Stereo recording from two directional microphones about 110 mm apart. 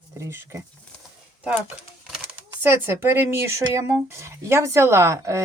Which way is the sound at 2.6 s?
20° right (ahead or behind).